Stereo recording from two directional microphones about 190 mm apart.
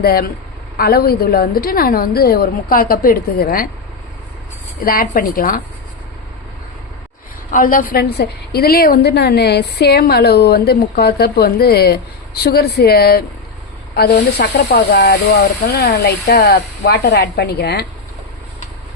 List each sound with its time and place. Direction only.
0.0 s a woman's voice: 55° left (ahead or behind)
4.8 s a woman's voice: 50° left (ahead or behind)
7.5 s a woman's voice: 45° left (ahead or behind)